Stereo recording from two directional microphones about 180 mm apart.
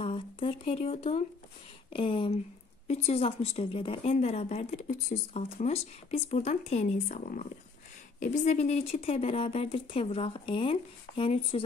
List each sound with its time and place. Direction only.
0.0 s a woman's voice: 30° left (ahead or behind)